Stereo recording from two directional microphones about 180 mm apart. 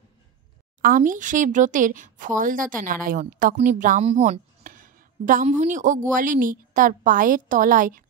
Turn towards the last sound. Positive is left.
turn(degrees=-50)  # may be behind; listen again after turning